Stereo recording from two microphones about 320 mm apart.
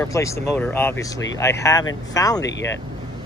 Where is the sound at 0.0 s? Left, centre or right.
Centre.